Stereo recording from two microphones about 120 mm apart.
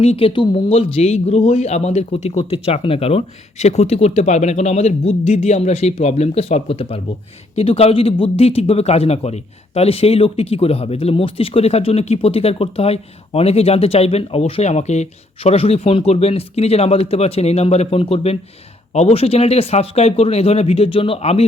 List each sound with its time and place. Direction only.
0.0 s speech: 55° left (ahead or behind)
0.7 s speech: 60° left (ahead or behind); by 2.5 s 80° left
2.5 s speech: 55° left (ahead or behind)